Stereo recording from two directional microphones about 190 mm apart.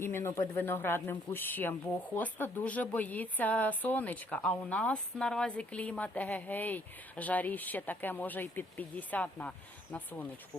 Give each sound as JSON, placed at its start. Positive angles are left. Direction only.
{"t": 0.0, "sound": "speech", "side_deg": 15}